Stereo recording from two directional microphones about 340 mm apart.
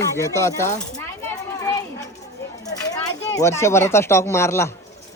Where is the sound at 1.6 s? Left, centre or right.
Centre.